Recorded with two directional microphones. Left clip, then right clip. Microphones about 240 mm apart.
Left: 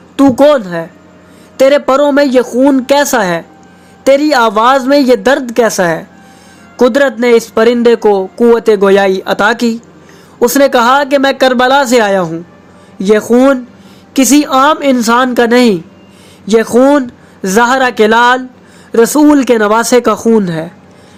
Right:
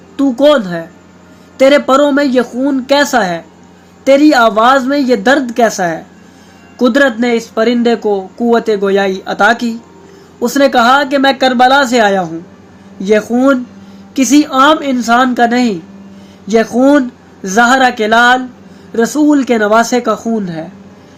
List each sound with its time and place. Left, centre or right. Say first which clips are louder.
0.2 s speech: left 2 dB; left